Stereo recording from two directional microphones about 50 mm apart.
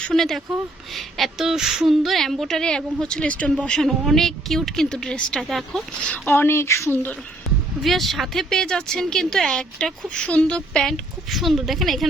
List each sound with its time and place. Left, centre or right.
0.1 s a woman's voice: centre; by 3.5 s left
3.8 s speech: centre
5.5 s a woman's voice: centre
6.2 s speech: left
7.8 s speech: centre; by 10.6 s left
10.8 s speech: centre
11.3 s a woman's voice: centre